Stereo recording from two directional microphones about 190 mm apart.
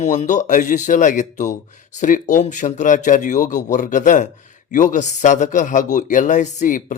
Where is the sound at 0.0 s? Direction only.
40° left (ahead or behind).